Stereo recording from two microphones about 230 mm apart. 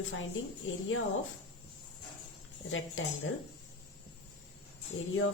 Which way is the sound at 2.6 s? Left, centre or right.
Left.